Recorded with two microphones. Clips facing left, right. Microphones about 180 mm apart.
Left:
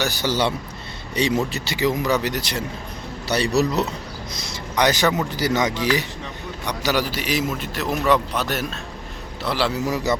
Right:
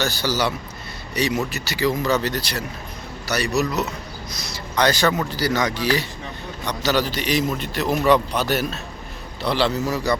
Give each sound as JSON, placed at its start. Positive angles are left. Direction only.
{"t": 0.0, "sound": "speech", "side_deg": 20}
{"t": 4.3, "sound": "a man's voice", "side_deg": 20}
{"t": 9.8, "sound": "speech", "side_deg": 20}